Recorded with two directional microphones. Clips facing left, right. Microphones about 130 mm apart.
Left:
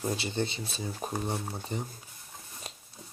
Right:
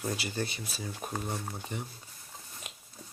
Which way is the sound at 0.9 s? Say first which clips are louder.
Left 3 dB; 30° left (ahead or behind).